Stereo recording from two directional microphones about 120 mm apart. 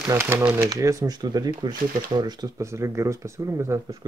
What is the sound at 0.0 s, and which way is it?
Speech, 25° right (ahead or behind).